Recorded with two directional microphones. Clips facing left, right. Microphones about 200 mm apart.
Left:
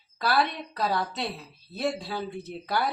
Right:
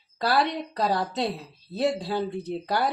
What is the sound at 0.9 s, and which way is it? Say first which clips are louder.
Speech: right 3 dB; 35° right (ahead or behind).